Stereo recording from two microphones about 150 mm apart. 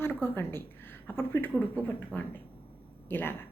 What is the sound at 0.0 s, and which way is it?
Speech, 15° left (ahead or behind).